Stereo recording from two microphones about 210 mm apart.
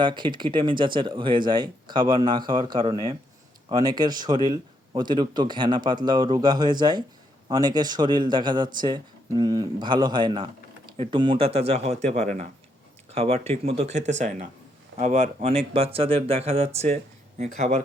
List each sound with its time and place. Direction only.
0.0 s a man's voice: 20° right (ahead or behind)